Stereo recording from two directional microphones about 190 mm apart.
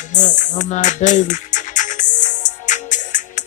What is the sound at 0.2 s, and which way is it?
Music, 40° left (ahead or behind).